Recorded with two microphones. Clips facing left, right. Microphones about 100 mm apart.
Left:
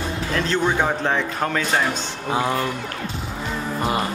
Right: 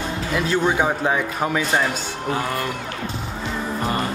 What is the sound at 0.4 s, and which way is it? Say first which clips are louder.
Speech: right 1 dB; 10° right (ahead or behind).